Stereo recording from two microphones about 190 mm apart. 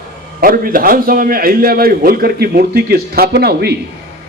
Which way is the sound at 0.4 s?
50° right (ahead or behind).